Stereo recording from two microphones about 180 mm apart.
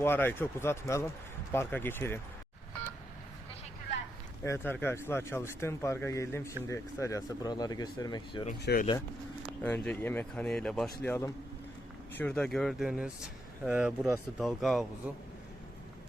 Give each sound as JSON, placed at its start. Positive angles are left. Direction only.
{"t": 0.0, "sound": "speech", "side_deg": 10}
{"t": 4.4, "sound": "speech", "side_deg": 15}
{"t": 8.6, "sound": "speech", "side_deg": 55}
{"t": 9.6, "sound": "speech", "side_deg": 10}